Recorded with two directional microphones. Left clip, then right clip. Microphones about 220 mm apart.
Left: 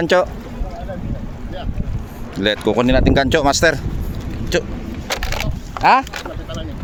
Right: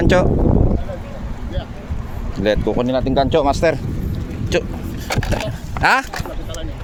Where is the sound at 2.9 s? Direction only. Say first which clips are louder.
Left 1 dB; 30° left (ahead or behind).